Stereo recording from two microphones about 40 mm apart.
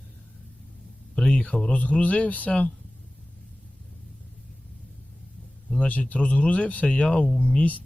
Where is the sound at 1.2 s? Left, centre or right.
Left.